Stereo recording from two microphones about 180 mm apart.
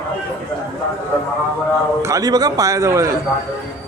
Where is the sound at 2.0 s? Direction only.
20° right (ahead or behind).